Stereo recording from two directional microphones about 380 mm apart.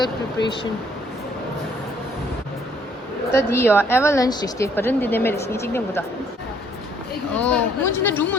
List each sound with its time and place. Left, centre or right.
0.4 s speech: left
3.5 s a woman's voice: centre
7.3 s a woman's voice: centre